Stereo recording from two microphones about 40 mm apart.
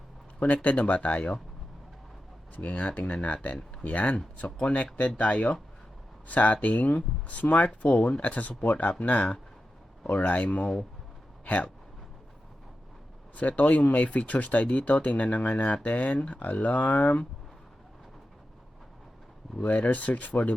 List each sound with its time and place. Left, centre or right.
0.4 s speech: left
2.6 s speech: left
7.9 s speech: left
8.2 s speech: left
13.3 s speech: left
15.7 s speech: left
19.6 s speech: left